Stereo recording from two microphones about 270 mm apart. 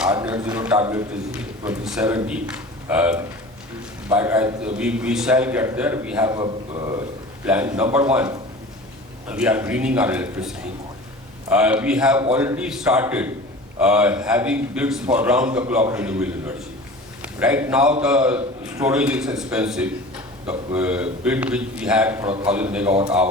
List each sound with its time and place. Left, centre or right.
0.0 s a man's voice: centre